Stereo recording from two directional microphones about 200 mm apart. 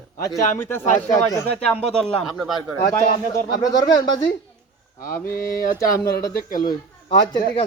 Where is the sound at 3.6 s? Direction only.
20° left (ahead or behind).